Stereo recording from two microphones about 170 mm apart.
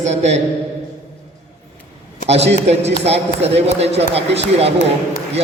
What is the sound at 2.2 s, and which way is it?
Speech, 40° right (ahead or behind).